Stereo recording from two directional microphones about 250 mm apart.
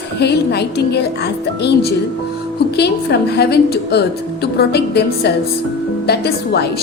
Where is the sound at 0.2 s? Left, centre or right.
Left.